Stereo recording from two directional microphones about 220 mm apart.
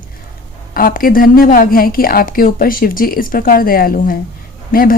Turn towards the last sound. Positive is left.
turn(degrees=40)  # may be behind; listen again after turning